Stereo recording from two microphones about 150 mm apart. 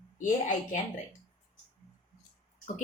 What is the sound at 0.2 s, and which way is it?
Speech, 60° left (ahead or behind).